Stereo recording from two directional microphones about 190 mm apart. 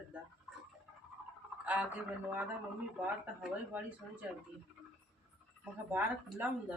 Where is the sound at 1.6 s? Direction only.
10° right (ahead or behind).